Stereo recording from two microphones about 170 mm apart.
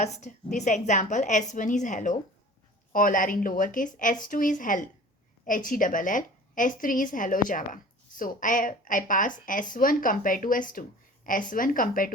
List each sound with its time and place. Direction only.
0.0 s speech: 45° left (ahead or behind)